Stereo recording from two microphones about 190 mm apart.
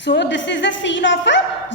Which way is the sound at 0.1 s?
70° left (ahead or behind).